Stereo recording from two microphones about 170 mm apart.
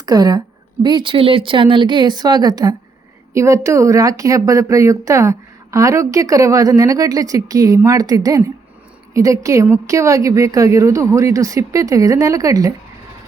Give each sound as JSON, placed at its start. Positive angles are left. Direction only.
{"t": 0.0, "sound": "a woman's voice", "side_deg": -25}